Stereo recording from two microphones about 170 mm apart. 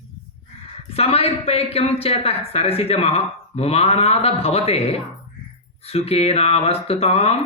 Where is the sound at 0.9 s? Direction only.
35° left (ahead or behind).